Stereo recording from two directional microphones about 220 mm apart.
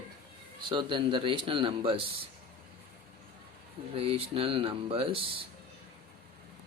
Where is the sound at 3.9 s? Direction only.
25° right (ahead or behind).